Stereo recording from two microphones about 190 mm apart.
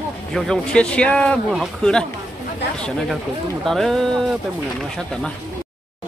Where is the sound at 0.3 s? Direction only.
Centre (ahead or behind).